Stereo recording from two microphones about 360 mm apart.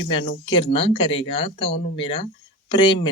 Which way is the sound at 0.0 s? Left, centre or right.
Centre.